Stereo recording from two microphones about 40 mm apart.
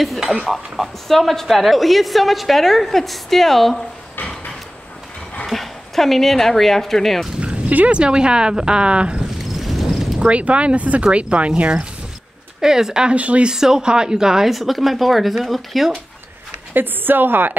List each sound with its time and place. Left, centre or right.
0.2 s speech: centre
0.5 s a woman's voice: centre
5.5 s speech: centre
7.3 s a sound: right
7.9 s speech: right
9.6 s a sound: centre
10.2 s speech: right
12.5 s speech: centre
13.1 s speech: right
13.5 s a woman's voice: centre
16.7 s a woman's voice: right